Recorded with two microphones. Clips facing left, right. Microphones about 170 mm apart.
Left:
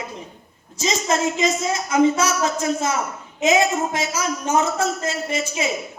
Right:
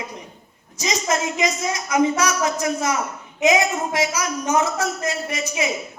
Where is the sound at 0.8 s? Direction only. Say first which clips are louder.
Left 2 dB; 30° left (ahead or behind).